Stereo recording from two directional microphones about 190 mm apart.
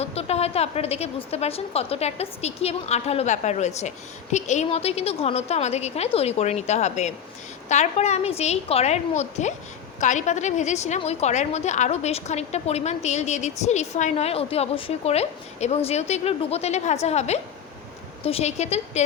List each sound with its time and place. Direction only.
0.0 s a woman's voice: 35° left (ahead or behind)